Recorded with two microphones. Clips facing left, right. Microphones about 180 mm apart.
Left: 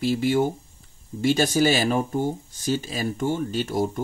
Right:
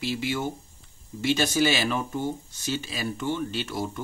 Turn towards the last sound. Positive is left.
turn(degrees=45)  # may be behind; listen again after turning